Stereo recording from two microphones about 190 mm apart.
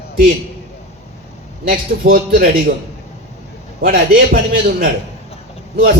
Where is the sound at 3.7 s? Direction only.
55° right (ahead or behind).